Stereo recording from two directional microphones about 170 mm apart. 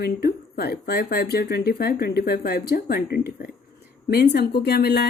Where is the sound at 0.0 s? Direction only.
70° left (ahead or behind).